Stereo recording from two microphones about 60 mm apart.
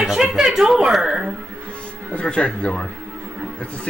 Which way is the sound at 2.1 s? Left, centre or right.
Centre.